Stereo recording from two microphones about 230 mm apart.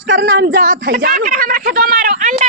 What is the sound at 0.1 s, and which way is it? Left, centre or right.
Speech, right.